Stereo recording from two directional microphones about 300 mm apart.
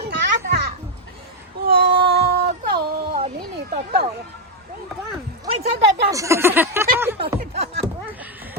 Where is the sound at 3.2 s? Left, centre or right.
Right.